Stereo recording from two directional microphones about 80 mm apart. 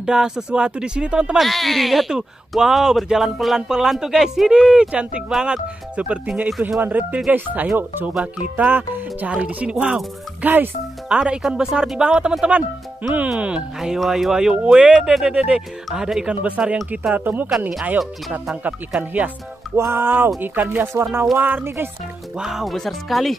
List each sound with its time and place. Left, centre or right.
0.0 s speech: centre
1.4 s speech: centre
13.7 s speech: centre
19.7 s speech: right
22.4 s speech: centre